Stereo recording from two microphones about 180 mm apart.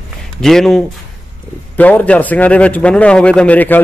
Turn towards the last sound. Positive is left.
turn(degrees=10)  # may be behind; listen again after turning